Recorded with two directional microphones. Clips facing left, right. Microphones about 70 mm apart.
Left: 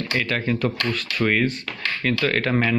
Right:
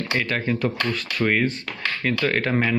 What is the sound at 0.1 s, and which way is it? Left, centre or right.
Speech, right.